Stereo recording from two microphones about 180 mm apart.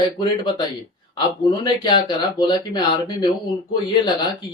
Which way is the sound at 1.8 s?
25° left (ahead or behind).